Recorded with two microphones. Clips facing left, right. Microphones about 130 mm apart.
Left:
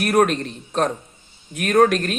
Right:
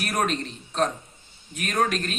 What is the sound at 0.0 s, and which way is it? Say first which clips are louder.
Speech: left 8 dB; 50° left (ahead or behind).